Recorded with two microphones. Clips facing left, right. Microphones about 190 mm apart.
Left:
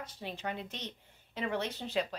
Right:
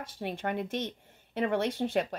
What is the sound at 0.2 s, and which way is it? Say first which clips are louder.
A woman's voice: right 7 dB; 55° right (ahead or behind).